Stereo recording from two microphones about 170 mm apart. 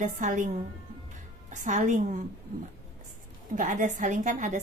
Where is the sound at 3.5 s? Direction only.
50° right (ahead or behind).